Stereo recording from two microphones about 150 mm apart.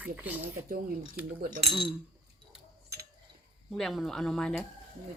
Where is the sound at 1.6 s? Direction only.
35° right (ahead or behind).